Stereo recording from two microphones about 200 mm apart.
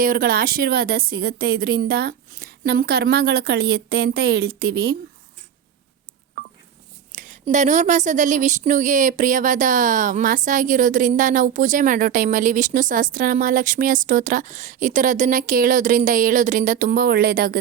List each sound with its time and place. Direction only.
0.0 s speech: 45° right (ahead or behind)
7.5 s speech: 35° right (ahead or behind)